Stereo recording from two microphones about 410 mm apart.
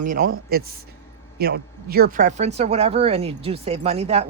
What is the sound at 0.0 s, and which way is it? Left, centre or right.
Speech, centre.